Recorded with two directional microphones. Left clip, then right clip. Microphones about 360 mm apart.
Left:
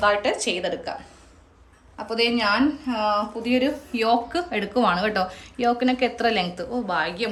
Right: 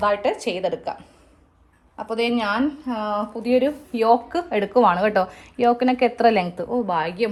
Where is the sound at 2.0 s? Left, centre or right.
Centre.